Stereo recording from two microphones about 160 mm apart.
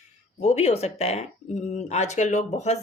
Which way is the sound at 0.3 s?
45° left (ahead or behind).